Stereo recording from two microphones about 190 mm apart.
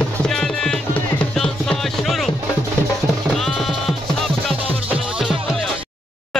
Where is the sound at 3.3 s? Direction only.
Centre (ahead or behind).